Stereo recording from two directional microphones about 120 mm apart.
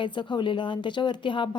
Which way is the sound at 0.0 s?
40° left (ahead or behind).